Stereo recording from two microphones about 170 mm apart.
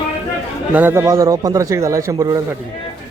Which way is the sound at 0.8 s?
15° right (ahead or behind).